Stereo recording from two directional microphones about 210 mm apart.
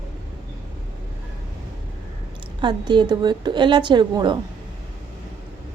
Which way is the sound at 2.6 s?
20° right (ahead or behind).